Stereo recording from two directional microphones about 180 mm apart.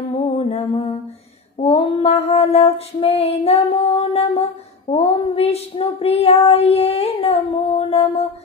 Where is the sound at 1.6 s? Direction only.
35° left (ahead or behind).